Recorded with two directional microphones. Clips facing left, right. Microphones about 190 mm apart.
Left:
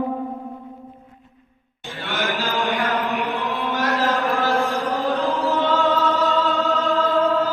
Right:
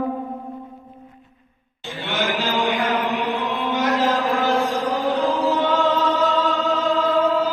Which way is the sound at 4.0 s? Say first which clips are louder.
Right 1 dB; 15° right (ahead or behind).